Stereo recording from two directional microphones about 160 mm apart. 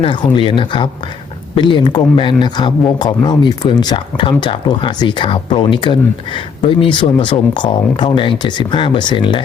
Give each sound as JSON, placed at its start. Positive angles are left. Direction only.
{"t": 0.0, "sound": "speech", "side_deg": 30}